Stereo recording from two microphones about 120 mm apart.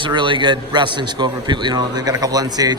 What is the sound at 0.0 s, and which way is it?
A man's voice, 40° right (ahead or behind).